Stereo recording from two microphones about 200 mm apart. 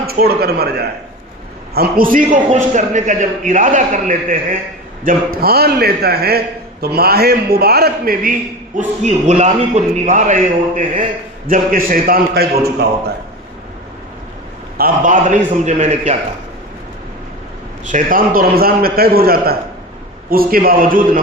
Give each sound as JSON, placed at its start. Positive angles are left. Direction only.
{"t": 0.1, "sound": "a man's voice", "side_deg": -50}
{"t": 14.8, "sound": "a man's voice", "side_deg": -45}
{"t": 17.8, "sound": "a man's voice", "side_deg": -40}